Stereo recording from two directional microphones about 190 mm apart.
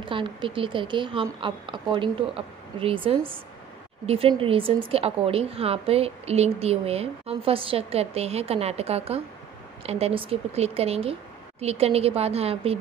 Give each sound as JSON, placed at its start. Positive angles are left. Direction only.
{"t": 0.0, "sound": "a woman's voice", "side_deg": -25}